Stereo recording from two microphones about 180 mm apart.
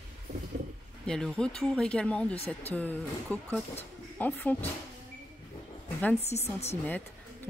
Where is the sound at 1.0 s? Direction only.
5° left (ahead or behind).